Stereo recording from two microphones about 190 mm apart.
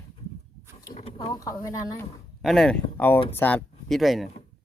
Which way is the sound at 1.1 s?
20° left (ahead or behind).